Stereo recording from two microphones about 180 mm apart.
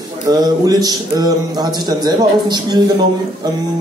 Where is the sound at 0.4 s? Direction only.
20° right (ahead or behind).